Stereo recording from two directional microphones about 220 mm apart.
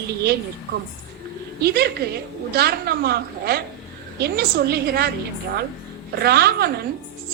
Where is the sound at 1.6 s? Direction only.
45° right (ahead or behind).